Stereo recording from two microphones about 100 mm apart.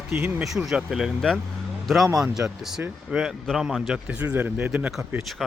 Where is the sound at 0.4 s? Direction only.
Centre (ahead or behind).